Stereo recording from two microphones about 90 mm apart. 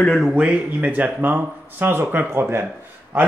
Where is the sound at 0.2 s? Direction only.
10° right (ahead or behind).